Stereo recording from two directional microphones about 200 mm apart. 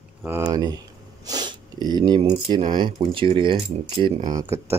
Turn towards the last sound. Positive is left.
turn(degrees=-15)  # may be behind; listen again after turning